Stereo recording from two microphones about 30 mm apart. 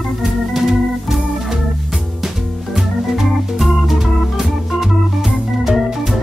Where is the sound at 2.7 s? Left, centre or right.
Centre.